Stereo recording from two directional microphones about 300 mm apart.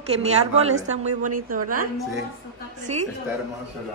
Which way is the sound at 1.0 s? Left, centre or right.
Right.